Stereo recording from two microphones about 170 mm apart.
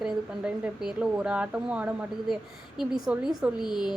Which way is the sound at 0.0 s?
5° right (ahead or behind).